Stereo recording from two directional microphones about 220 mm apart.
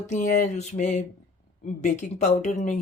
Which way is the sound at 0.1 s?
35° left (ahead or behind).